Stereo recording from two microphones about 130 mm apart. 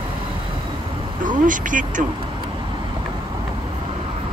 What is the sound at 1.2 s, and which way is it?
Speech, 90° right.